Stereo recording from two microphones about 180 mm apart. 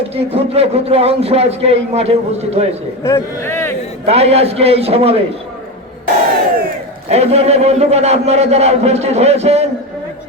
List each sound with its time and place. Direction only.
0.1 s a man's voice: 35° right (ahead or behind)
3.0 s speech: 15° left (ahead or behind)
4.0 s a man's voice: 35° right (ahead or behind)
7.1 s a man's voice: 35° right (ahead or behind)